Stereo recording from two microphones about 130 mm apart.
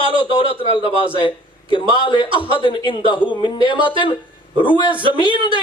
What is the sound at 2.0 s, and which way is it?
A man's voice, 40° left (ahead or behind).